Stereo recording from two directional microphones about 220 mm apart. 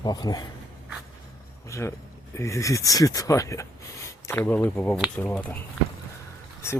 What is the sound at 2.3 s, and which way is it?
Speech, 15° left (ahead or behind).